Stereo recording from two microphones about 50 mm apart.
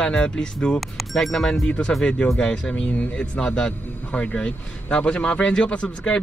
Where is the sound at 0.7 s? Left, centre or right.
Centre.